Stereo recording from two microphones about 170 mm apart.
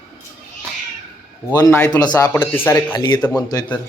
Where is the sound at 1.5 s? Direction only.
15° left (ahead or behind).